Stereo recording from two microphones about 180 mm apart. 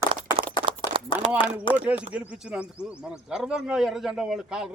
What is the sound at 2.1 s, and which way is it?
Speech, 5° right (ahead or behind).